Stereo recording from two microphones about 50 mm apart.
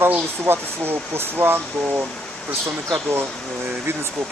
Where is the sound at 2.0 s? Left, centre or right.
Centre.